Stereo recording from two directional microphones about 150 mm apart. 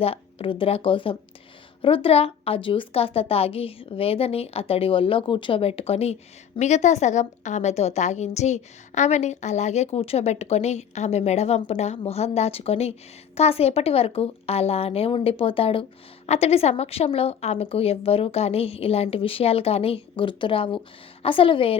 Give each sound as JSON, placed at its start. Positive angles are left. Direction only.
{"t": 0.0, "sound": "a woman's voice", "side_deg": 40}